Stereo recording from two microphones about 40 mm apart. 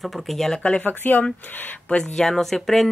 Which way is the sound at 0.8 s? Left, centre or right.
Left.